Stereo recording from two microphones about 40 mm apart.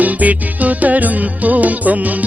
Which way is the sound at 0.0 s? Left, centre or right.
Right.